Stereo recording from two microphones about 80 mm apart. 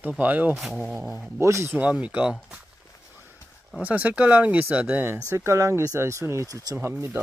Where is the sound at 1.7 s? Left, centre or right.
Centre.